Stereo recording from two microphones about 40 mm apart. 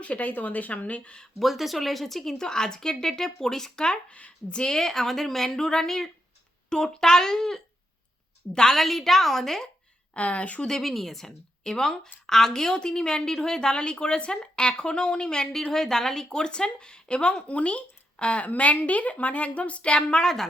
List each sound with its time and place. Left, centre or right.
0.0 s speech: left
1.4 s a woman's voice: centre
4.1 s speech: left
4.6 s a woman's voice: centre
8.7 s a woman's voice: centre
10.2 s speech: left
10.7 s a woman's voice: centre; by 20.2 s left
20.2 s a woman's voice: centre